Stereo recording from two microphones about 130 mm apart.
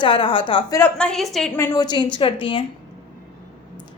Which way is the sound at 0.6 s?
25° left (ahead or behind).